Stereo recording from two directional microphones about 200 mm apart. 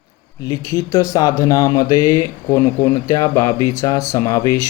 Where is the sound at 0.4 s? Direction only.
15° left (ahead or behind).